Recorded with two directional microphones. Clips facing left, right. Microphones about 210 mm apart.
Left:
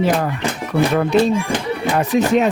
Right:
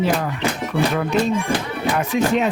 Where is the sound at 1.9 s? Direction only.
40° left (ahead or behind).